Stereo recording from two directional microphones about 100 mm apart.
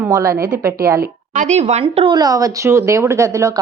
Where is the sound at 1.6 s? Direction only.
90° right; by 2.2 s 60° right (ahead or behind).